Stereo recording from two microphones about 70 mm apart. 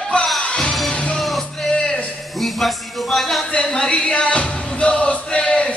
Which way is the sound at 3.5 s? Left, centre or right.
Centre.